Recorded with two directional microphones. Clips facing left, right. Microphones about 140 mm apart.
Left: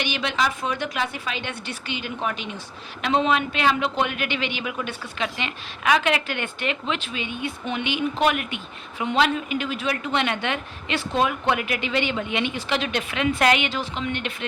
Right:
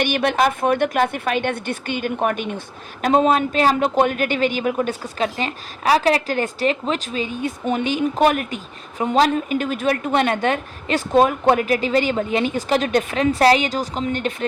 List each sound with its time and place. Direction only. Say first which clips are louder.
0.0 s a woman's voice: right 7 dB; 50° right (ahead or behind)